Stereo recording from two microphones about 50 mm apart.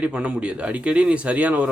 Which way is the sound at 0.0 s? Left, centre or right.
Right.